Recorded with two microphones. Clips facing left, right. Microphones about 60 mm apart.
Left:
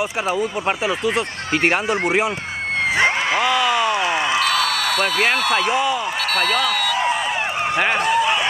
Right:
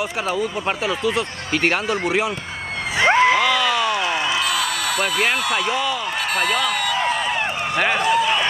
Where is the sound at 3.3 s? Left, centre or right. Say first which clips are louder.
Even; centre.